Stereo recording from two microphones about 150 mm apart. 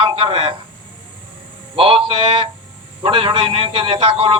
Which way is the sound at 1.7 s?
35° right (ahead or behind).